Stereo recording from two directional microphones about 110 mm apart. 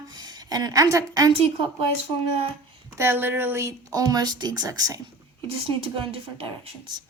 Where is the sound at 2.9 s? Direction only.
20° right (ahead or behind).